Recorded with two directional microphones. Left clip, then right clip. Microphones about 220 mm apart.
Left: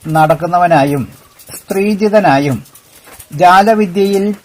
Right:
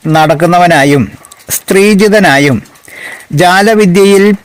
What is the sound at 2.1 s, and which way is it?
Speech, 90° right.